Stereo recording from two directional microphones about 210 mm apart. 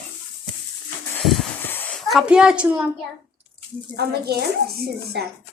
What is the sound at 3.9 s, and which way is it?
Speech, 50° right (ahead or behind).